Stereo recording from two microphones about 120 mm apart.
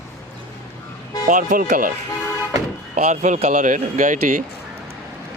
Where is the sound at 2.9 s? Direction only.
85° right.